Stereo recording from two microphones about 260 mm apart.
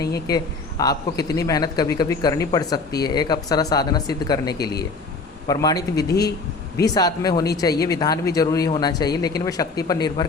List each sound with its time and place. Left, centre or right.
0.3 s speech: centre
6.1 s speech: left
6.8 s speech: centre